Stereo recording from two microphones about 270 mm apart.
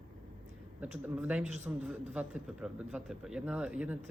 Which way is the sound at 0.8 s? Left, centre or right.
Centre.